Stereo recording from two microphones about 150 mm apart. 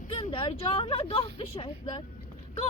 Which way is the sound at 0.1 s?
40° left (ahead or behind).